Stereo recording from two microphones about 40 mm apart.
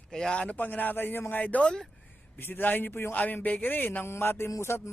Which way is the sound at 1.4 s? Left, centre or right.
Left.